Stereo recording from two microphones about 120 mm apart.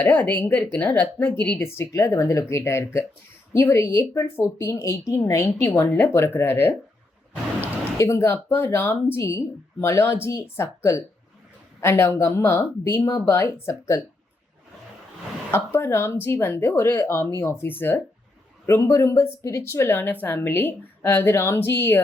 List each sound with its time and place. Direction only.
0.0 s a woman's voice: 15° left (ahead or behind)
7.9 s speech: 25° left (ahead or behind)
15.5 s speech: 20° left (ahead or behind)